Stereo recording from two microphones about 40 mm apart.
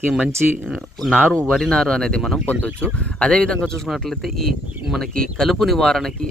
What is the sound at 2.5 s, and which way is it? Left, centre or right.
Speech, left.